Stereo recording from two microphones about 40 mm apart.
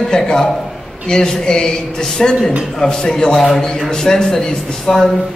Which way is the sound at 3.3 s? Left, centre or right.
Centre.